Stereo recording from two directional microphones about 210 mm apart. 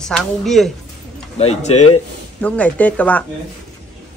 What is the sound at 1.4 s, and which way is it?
Speech, 30° left (ahead or behind).